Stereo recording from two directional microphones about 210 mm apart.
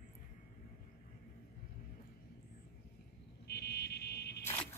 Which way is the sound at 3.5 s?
50° left (ahead or behind).